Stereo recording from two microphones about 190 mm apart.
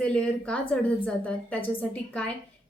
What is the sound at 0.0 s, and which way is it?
A woman's voice, 5° left (ahead or behind).